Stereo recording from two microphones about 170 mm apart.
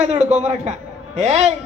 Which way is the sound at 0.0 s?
45° right (ahead or behind).